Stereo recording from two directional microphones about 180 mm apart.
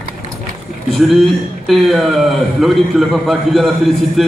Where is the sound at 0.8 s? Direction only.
Centre (ahead or behind).